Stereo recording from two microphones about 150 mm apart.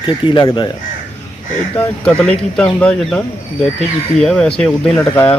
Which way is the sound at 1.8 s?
5° left (ahead or behind).